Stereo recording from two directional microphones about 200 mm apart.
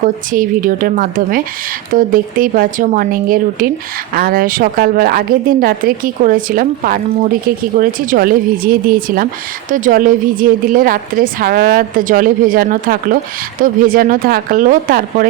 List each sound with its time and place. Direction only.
0.0 s a woman's voice: 45° right (ahead or behind)